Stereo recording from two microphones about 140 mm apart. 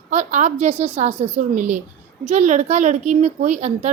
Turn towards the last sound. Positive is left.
turn(degrees=-55)  # may be behind; listen again after turning